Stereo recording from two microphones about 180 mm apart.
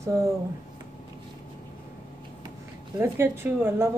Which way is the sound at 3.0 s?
15° right (ahead or behind).